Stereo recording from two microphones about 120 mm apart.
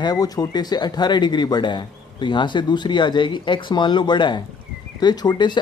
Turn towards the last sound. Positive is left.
turn(degrees=40)  # may be behind; listen again after turning